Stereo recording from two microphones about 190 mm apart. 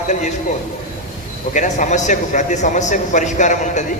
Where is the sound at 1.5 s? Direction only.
40° left (ahead or behind).